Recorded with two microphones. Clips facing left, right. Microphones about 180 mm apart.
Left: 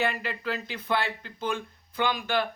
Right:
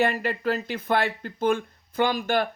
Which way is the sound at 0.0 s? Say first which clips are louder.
Right 6 dB; 45° right (ahead or behind).